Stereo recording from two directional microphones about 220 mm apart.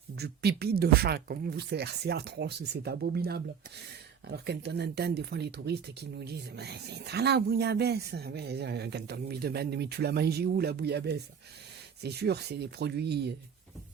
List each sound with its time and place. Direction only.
0.2 s speech: 45° right (ahead or behind)